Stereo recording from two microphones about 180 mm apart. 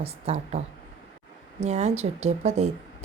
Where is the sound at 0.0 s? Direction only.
35° right (ahead or behind).